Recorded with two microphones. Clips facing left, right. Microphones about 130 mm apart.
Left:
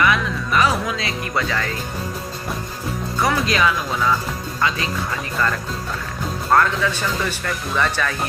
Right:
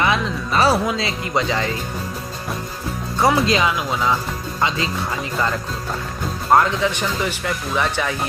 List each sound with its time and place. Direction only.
0.0 s music: 30° right (ahead or behind)
0.9 s speech: 25° right (ahead or behind)
3.2 s speech: 25° right (ahead or behind)
6.5 s speech: 20° right (ahead or behind)